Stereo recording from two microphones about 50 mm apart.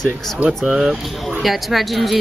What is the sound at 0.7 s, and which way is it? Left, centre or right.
Speech, centre.